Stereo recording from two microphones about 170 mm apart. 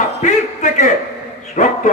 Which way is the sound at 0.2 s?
45° left (ahead or behind).